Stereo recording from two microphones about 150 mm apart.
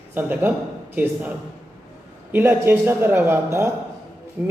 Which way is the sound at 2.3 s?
15° right (ahead or behind).